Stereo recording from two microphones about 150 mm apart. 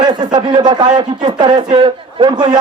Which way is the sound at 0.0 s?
30° right (ahead or behind).